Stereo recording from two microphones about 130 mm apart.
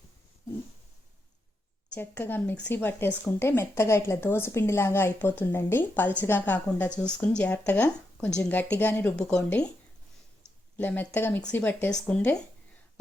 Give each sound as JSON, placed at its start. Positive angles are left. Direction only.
{"t": 2.0, "sound": "speech", "side_deg": 15}
{"t": 10.8, "sound": "speech", "side_deg": 15}